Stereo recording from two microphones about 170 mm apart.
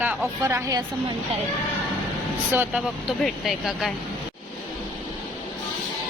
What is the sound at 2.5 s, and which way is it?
Speech, 10° right (ahead or behind).